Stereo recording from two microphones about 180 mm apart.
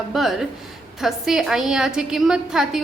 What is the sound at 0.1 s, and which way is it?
A woman's voice, centre (ahead or behind).